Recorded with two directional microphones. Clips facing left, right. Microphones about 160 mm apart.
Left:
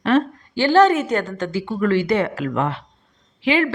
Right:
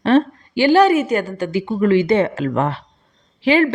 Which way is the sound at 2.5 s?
45° right (ahead or behind).